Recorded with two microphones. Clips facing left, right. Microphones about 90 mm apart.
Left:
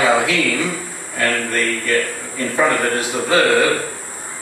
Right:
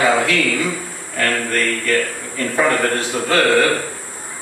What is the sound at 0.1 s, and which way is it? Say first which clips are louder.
Speech: even; 15° left (ahead or behind).